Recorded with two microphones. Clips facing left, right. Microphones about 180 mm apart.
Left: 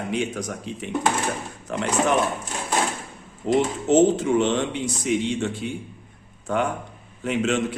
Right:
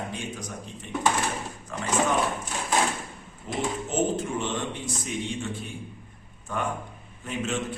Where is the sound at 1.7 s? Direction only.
70° left (ahead or behind).